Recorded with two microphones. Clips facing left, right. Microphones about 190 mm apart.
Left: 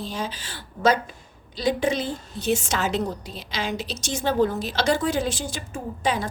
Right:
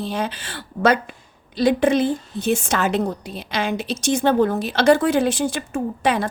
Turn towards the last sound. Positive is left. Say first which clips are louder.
# right 5 dB
turn(degrees=-65)  # may be behind; listen again after turning